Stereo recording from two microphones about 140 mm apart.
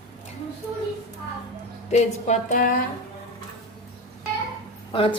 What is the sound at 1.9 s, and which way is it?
Speech, 55° left (ahead or behind).